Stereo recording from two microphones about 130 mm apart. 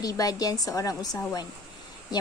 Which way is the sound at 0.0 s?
30° left (ahead or behind).